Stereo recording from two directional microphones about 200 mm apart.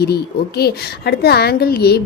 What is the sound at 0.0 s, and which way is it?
A woman's voice, 50° left (ahead or behind).